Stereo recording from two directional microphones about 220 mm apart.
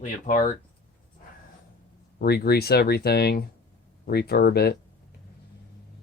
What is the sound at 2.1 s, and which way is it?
Speech, 45° left (ahead or behind).